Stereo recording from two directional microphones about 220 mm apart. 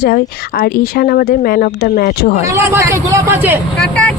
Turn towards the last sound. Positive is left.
turn(degrees=5)  # may be behind; listen again after turning